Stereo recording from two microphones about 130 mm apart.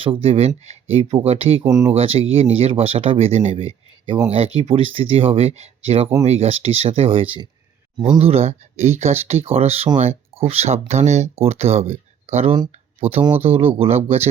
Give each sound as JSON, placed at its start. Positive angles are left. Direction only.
{"t": 0.0, "sound": "speech", "side_deg": -45}
{"t": 1.6, "sound": "speech", "side_deg": -25}
{"t": 2.0, "sound": "speech", "side_deg": -50}